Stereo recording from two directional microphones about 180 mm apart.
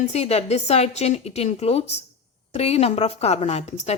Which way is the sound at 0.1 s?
35° left (ahead or behind).